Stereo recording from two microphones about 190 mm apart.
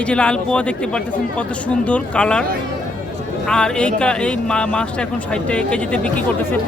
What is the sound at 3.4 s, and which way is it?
Speech, 5° left (ahead or behind).